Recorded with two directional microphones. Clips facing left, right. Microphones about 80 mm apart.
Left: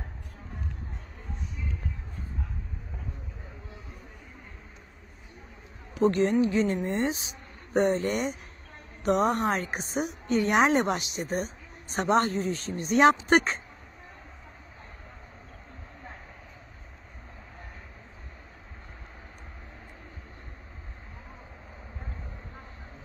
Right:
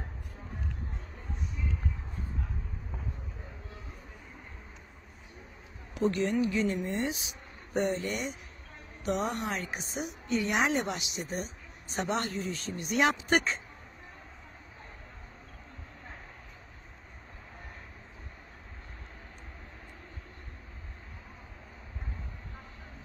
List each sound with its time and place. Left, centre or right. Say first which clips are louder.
5.9 s a woman's voice: left 5 dB; left